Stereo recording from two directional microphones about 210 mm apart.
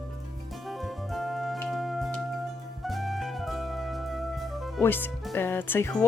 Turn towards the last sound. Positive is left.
turn(degrees=10)  # may be behind; listen again after turning